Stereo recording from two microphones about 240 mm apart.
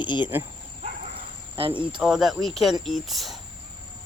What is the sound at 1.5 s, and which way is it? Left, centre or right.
Speech, right.